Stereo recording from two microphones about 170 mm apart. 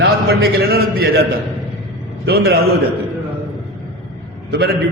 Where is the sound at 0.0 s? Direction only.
70° right (ahead or behind).